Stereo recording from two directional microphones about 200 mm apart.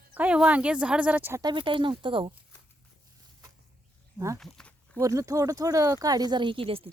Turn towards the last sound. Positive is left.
turn(degrees=-30)  # may be behind; listen again after turning